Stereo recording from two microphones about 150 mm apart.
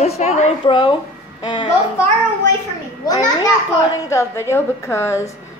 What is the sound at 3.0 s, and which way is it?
A woman's voice, 25° left (ahead or behind).